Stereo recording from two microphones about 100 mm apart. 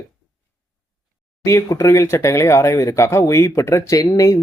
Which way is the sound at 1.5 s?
30° left (ahead or behind).